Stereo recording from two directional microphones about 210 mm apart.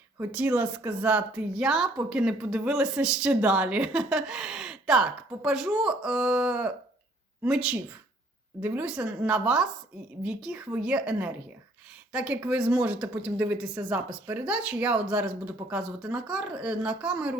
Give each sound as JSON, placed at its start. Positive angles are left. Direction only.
{"t": 0.2, "sound": "a woman's voice", "side_deg": -5}